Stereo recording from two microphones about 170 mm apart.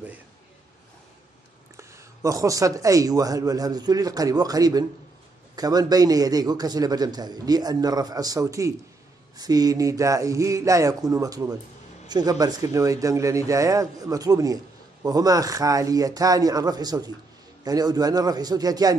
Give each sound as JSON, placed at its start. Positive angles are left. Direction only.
{"t": 1.8, "sound": "a man's voice", "side_deg": -20}